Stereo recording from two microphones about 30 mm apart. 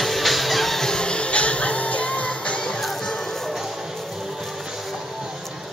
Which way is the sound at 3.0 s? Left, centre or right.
Centre.